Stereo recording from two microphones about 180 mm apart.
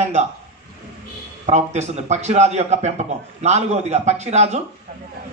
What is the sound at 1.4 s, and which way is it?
A man's voice, 40° right (ahead or behind).